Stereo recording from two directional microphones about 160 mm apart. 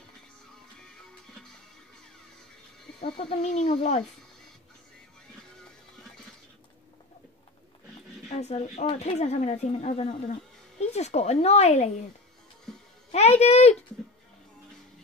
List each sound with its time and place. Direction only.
3.2 s a woman's voice: 40° left (ahead or behind)
8.3 s a woman's voice: 45° left (ahead or behind)
13.1 s speech: 40° left (ahead or behind)